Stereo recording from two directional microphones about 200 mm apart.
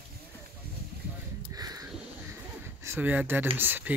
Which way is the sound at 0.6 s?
50° right (ahead or behind).